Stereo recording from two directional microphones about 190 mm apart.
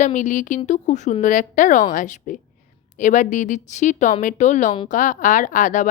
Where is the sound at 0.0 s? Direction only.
40° left (ahead or behind).